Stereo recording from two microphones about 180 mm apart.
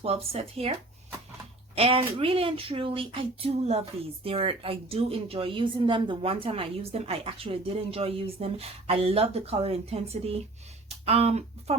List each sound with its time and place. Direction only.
0.0 s speech: 35° right (ahead or behind)